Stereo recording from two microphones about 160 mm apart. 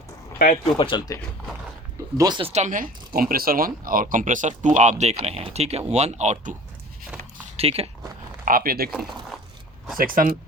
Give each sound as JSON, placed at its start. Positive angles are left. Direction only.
{"t": 0.8, "sound": "speech", "side_deg": 30}
{"t": 2.1, "sound": "speech", "side_deg": -25}
{"t": 2.5, "sound": "speech", "side_deg": -50}
{"t": 8.4, "sound": "speech", "side_deg": -65}
{"t": 10.0, "sound": "speech", "side_deg": -60}